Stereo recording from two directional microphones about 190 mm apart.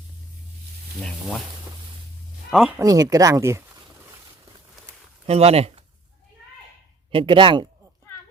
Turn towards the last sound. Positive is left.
turn(degrees=-25)  # may be behind; listen again after turning